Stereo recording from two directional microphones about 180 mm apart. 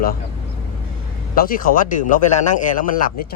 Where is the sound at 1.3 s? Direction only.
50° left (ahead or behind).